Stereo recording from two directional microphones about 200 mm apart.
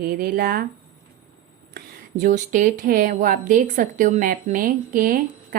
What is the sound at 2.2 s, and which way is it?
A woman's voice, 40° right (ahead or behind).